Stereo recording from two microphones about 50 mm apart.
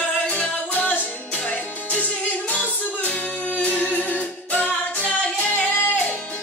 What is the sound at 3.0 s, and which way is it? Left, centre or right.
Music, left.